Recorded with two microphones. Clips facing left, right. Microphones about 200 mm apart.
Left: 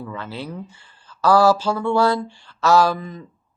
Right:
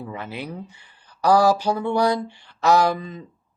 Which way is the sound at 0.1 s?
15° right (ahead or behind).